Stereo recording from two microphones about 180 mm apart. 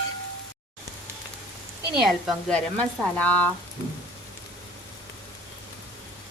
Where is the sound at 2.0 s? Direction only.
5° left (ahead or behind).